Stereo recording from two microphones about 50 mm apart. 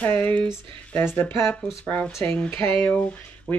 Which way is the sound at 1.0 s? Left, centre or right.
Left.